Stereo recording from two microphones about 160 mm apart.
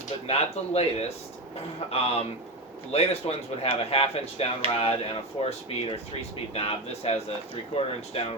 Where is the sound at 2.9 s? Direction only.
40° left (ahead or behind).